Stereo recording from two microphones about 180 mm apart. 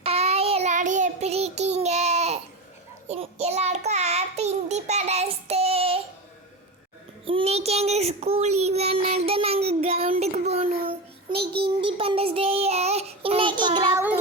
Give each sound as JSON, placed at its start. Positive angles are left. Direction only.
{"t": 0.0, "sound": "child singing", "side_deg": -35}
{"t": 7.3, "sound": "child singing", "side_deg": -30}